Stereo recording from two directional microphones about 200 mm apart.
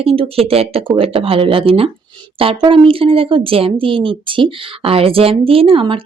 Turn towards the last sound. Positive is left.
turn(degrees=-25)  # may be behind; listen again after turning